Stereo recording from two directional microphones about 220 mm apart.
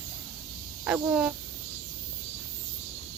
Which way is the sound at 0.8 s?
5° right (ahead or behind).